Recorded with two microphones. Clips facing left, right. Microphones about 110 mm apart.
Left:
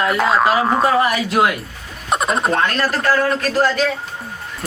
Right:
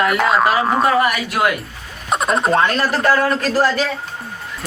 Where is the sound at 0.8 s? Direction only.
25° left (ahead or behind).